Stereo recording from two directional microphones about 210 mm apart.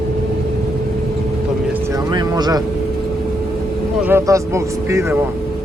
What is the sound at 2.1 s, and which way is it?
Vehicle, 20° right (ahead or behind).